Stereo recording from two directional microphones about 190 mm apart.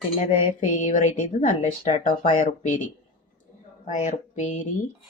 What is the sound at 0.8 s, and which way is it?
Speech, 40° left (ahead or behind).